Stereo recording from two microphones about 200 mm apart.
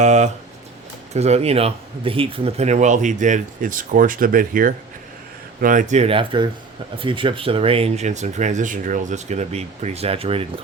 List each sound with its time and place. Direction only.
0.0 s speech: 35° right (ahead or behind)